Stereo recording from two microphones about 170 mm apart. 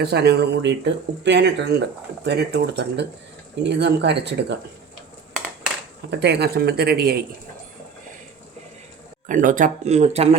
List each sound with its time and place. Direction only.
0.0 s speech: 75° right (ahead or behind)
6.1 s speech: 80° right; by 7.2 s 65° right (ahead or behind)
9.2 s speech: 50° right (ahead or behind)